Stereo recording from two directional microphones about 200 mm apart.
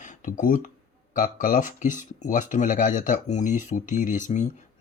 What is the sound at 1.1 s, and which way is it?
Speech, 40° left (ahead or behind).